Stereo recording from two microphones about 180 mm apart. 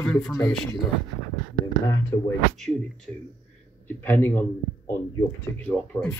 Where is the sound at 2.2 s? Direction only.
5° left (ahead or behind).